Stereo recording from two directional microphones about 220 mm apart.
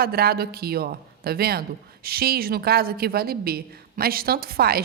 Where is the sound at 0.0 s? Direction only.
45° right (ahead or behind).